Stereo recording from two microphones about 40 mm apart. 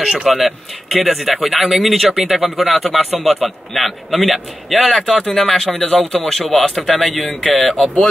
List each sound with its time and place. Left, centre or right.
0.0 s speech: centre
5.0 s speech: centre
6.6 s a man's voice: left
6.9 s speech: centre